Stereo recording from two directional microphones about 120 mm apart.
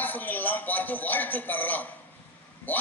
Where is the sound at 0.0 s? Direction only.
15° left (ahead or behind).